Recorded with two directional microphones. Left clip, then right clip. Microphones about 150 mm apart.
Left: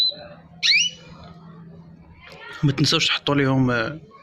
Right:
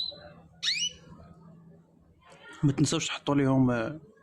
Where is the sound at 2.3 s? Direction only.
45° right (ahead or behind).